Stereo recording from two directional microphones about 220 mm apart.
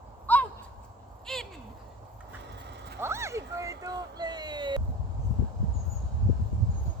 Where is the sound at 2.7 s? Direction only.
50° right (ahead or behind).